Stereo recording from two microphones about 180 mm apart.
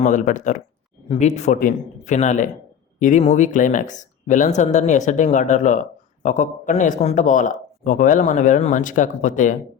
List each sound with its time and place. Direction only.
0.0 s a man's voice: 45° left (ahead or behind)